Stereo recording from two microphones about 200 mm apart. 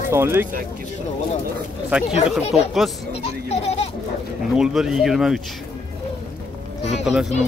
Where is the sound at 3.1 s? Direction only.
30° left (ahead or behind).